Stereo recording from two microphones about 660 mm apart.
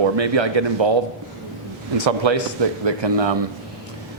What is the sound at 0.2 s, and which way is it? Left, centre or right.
Speech, right.